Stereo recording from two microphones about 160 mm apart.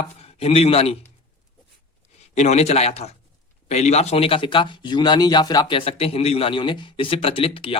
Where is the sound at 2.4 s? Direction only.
45° left (ahead or behind).